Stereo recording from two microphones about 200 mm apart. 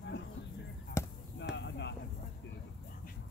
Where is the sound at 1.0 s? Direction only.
15° left (ahead or behind).